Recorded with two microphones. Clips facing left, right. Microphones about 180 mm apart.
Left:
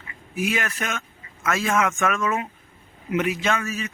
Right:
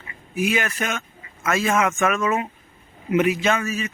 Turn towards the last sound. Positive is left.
turn(degrees=-5)  # may be behind; listen again after turning